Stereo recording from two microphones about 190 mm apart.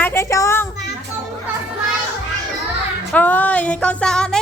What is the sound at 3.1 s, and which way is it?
Speech, 10° left (ahead or behind).